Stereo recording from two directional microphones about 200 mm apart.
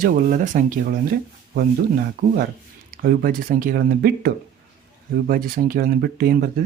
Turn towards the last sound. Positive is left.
turn(degrees=-50)  # may be behind; listen again after turning